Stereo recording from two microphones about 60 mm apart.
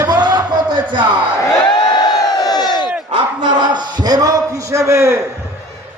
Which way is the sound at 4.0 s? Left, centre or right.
Right.